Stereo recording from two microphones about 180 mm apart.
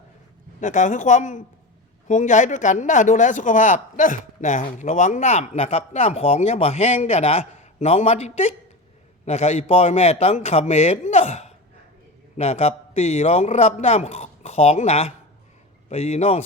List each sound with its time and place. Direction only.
0.6 s a woman's voice: 45° left (ahead or behind)